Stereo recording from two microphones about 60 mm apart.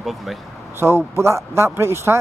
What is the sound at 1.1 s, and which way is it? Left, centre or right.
Speech, right.